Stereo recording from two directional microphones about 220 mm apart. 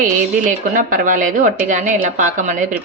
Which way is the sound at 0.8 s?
35° right (ahead or behind).